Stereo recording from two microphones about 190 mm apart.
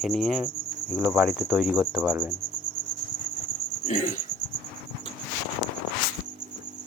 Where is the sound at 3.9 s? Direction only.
40° left (ahead or behind).